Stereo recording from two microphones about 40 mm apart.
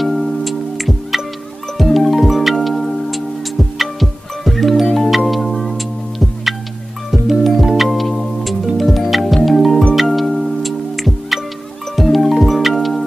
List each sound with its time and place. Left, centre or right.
0.0 s music: centre